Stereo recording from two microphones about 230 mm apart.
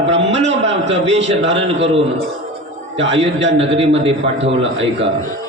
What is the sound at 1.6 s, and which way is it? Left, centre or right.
Speech, right.